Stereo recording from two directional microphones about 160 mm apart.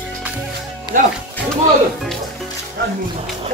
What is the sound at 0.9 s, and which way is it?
Speech, 60° right (ahead or behind).